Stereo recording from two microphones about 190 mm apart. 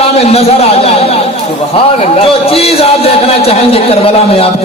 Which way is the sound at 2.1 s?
30° left (ahead or behind).